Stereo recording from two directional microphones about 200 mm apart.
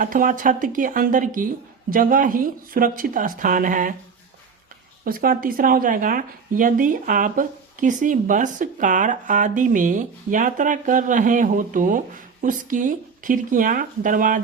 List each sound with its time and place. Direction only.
0.0 s speech: 40° right (ahead or behind)
5.0 s speech: 45° right (ahead or behind)